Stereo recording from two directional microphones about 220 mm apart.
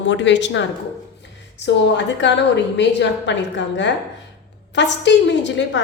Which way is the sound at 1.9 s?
55° left (ahead or behind).